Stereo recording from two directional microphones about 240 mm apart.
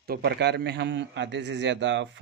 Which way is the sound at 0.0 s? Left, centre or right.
Right.